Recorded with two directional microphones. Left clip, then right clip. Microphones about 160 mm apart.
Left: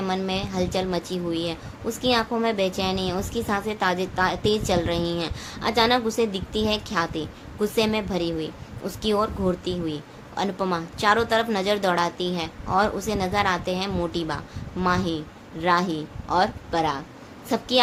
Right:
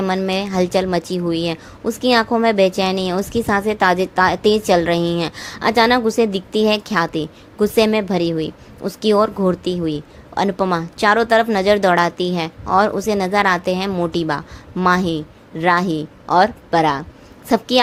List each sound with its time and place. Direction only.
0.0 s a woman's voice: 45° right (ahead or behind)